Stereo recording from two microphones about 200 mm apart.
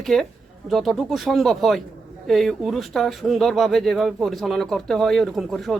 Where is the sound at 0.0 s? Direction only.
Centre (ahead or behind).